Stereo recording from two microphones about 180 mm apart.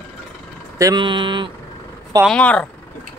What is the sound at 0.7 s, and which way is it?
Speech, 20° right (ahead or behind).